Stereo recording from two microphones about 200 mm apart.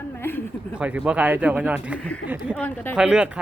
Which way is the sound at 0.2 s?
10° left (ahead or behind).